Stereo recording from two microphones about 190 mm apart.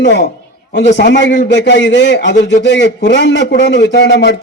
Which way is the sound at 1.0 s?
65° left (ahead or behind).